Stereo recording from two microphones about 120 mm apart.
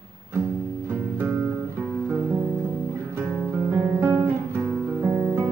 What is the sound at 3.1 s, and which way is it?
Guitar, 15° right (ahead or behind).